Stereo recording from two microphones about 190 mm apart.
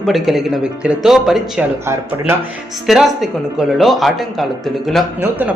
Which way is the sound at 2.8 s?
Centre (ahead or behind).